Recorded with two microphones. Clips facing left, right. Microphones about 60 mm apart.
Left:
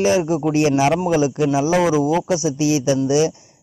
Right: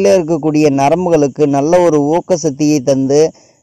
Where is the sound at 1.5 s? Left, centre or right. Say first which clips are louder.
Right 8 dB; right.